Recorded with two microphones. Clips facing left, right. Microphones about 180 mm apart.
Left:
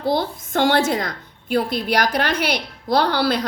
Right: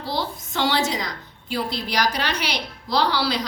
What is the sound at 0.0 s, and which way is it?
A woman's voice, 55° left (ahead or behind).